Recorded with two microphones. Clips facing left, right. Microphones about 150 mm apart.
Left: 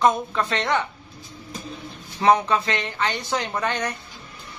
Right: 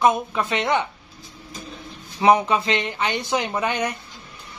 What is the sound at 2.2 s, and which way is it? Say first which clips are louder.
A man's voice: right 1 dB; 15° right (ahead or behind).